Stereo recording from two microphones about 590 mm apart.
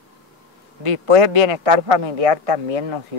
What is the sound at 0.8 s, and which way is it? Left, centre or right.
Speech, right.